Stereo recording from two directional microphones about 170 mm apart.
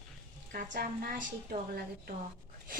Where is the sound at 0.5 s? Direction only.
55° right (ahead or behind).